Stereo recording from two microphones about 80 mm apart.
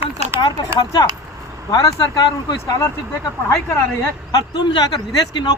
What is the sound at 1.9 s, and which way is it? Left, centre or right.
Speech, left.